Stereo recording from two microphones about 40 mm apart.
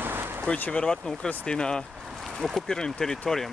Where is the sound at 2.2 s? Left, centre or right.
Centre.